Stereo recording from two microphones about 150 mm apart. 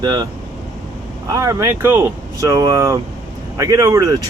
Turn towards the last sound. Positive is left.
turn(degrees=-25)  # may be behind; listen again after turning